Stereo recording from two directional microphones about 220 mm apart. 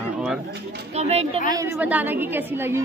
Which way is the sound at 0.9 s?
30° right (ahead or behind).